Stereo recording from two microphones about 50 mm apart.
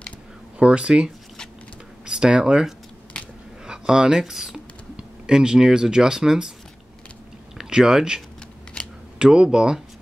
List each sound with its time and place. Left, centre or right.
0.6 s speech: centre
7.5 s speech: centre
9.2 s speech: centre